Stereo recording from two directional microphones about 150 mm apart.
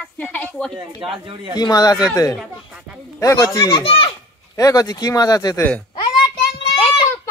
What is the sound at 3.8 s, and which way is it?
Speech, 40° left (ahead or behind).